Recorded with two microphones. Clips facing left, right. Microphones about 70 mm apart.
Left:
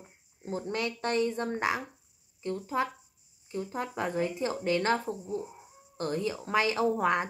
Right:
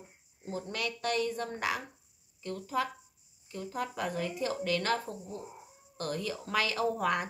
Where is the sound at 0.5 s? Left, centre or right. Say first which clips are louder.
Left 4 dB; left.